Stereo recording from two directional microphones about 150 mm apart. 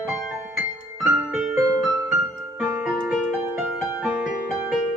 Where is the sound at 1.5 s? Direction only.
25° right (ahead or behind).